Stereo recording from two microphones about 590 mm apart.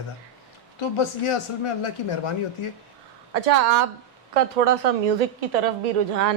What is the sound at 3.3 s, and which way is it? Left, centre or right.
A woman's voice, right.